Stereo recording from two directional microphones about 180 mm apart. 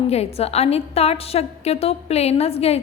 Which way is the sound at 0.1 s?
35° left (ahead or behind).